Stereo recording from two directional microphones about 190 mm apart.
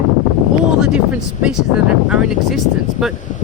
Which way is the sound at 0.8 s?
5° right (ahead or behind).